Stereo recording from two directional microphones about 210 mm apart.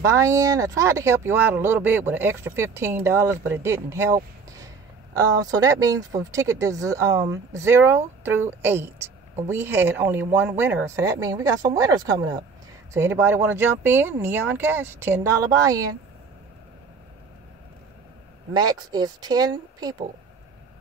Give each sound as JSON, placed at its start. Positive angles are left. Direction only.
{"t": 0.0, "sound": "speech", "side_deg": -15}
{"t": 18.5, "sound": "speech", "side_deg": -20}